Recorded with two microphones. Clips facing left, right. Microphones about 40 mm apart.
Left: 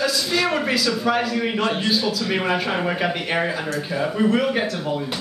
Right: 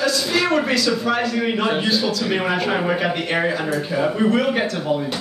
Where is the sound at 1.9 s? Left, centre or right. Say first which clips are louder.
Right 1 dB; centre.